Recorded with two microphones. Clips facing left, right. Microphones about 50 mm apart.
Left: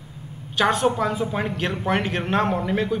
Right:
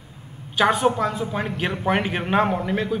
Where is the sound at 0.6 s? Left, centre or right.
Centre.